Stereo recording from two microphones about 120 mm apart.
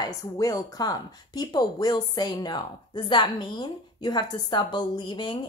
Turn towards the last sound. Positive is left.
turn(degrees=40)  # may be behind; listen again after turning